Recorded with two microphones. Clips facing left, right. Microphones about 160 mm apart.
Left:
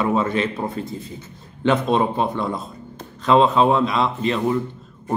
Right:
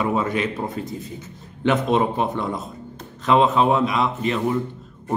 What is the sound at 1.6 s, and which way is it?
Speech, 15° right (ahead or behind).